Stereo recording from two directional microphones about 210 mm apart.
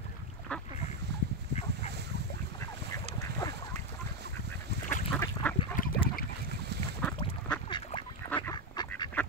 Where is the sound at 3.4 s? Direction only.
20° left (ahead or behind).